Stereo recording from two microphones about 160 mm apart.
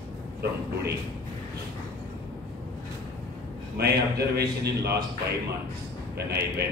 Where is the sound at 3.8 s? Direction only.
85° right.